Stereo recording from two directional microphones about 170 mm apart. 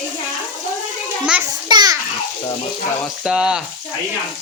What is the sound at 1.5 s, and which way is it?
Speech, 25° right (ahead or behind).